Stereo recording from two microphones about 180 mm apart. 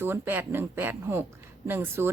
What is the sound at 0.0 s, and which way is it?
A woman's voice, 10° right (ahead or behind).